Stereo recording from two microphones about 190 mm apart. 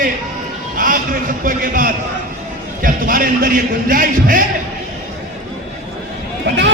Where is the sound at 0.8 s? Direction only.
45° right (ahead or behind).